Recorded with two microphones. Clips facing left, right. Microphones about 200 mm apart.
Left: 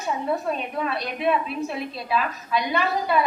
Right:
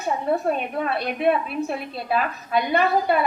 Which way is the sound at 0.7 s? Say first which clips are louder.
Right 3 dB; 50° right (ahead or behind).